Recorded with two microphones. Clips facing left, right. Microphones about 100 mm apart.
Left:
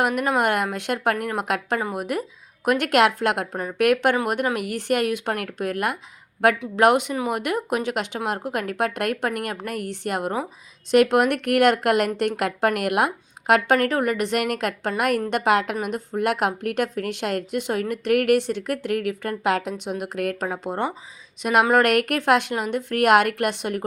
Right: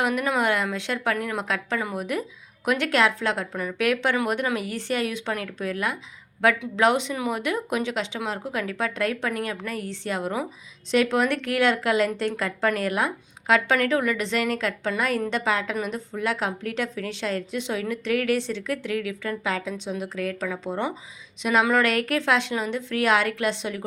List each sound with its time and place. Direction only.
0.2 s a woman's voice: 50° left (ahead or behind)
2.0 s a woman's voice: 45° left (ahead or behind)
13.7 s a woman's voice: 50° left (ahead or behind)
21.7 s a woman's voice: 55° left (ahead or behind)